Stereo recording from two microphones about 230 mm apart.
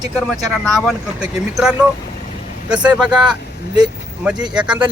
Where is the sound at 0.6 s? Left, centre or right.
Centre.